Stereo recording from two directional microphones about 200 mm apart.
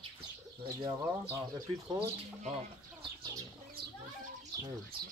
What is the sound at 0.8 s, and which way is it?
Speech, 20° right (ahead or behind).